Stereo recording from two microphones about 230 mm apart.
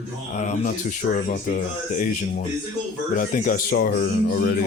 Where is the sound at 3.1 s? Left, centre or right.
Left.